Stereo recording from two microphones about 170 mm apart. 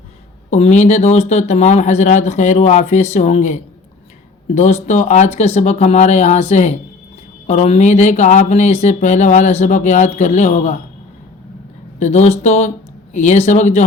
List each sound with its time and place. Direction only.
0.5 s speech: 40° left (ahead or behind)
11.9 s speech: 40° left (ahead or behind)